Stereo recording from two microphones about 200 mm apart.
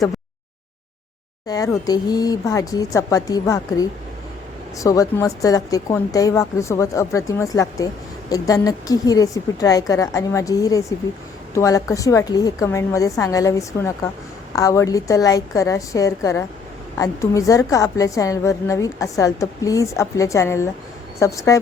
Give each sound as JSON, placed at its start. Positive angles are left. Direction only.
{"t": 1.5, "sound": "a woman's voice", "side_deg": 20}